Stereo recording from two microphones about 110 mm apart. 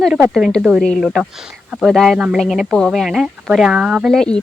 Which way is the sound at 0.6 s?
5° right (ahead or behind).